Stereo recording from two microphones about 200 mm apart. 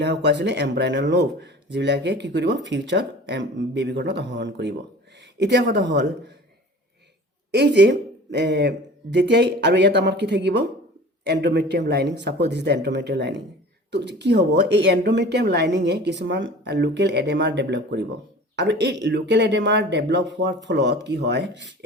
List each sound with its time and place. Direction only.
0.0 s speech: 60° right (ahead or behind)
7.5 s speech: 60° right (ahead or behind)